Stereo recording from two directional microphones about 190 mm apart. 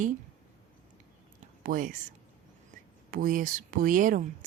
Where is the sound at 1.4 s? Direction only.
45° right (ahead or behind).